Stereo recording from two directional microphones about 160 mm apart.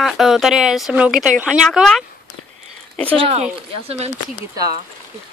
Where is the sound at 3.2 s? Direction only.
35° right (ahead or behind).